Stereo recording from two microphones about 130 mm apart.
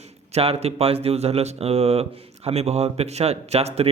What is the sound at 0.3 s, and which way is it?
Speech, 50° right (ahead or behind).